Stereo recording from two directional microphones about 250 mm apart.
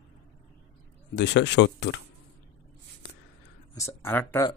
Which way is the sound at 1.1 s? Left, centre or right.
Left.